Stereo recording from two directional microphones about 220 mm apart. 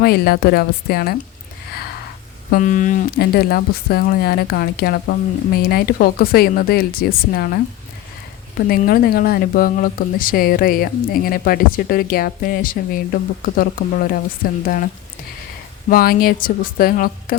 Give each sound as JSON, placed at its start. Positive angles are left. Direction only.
{"t": 0.0, "sound": "speech", "side_deg": 45}
{"t": 2.5, "sound": "speech", "side_deg": 35}
{"t": 8.6, "sound": "speech", "side_deg": 40}
{"t": 15.9, "sound": "speech", "side_deg": 40}